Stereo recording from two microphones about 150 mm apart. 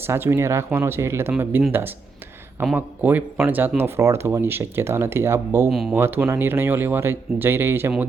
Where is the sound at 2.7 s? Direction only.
10° right (ahead or behind).